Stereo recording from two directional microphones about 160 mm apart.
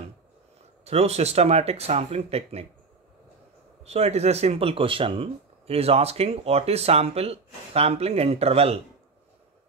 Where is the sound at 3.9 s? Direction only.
40° right (ahead or behind).